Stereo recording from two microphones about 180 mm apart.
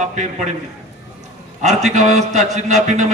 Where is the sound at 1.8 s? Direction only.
40° right (ahead or behind).